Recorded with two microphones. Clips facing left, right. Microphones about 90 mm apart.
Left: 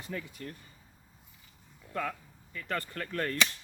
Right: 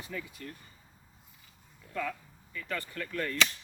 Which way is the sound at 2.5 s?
40° left (ahead or behind).